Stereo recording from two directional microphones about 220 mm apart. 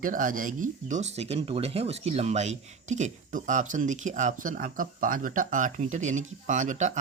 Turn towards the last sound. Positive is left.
turn(degrees=-35)  # may be behind; listen again after turning